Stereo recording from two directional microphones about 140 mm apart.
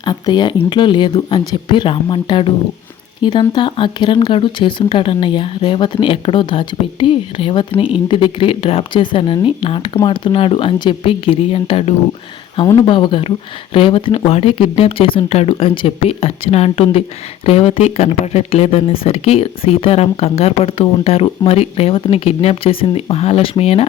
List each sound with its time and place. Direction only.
0.0 s speech: 30° left (ahead or behind)